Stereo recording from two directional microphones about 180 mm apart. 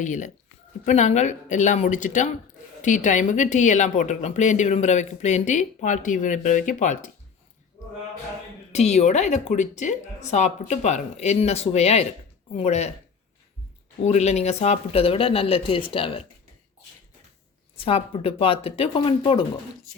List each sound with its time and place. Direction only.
0.0 s a woman's voice: 45° left (ahead or behind)
8.7 s speech: 40° left (ahead or behind)
14.0 s speech: 40° left (ahead or behind)
17.7 s speech: 30° left (ahead or behind)